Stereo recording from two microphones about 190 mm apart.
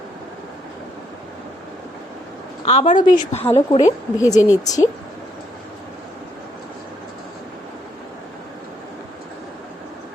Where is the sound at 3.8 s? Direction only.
15° left (ahead or behind).